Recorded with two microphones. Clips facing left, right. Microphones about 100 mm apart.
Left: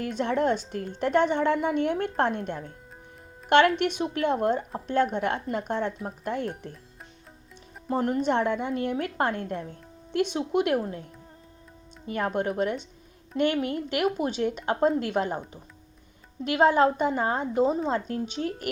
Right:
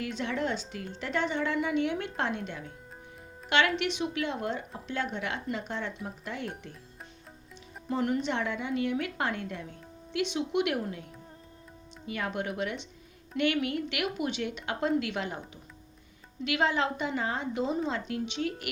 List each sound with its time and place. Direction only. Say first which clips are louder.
0.0 s speech: left 6 dB; 50° left (ahead or behind)
3.8 s speech: left 4 dB; 45° left (ahead or behind)
7.9 s a woman's voice: left 4 dB; 40° left (ahead or behind)
12.0 s a woman's voice: left 6 dB; 40° left (ahead or behind)
16.4 s a woman's voice: left 8 dB; 45° left (ahead or behind)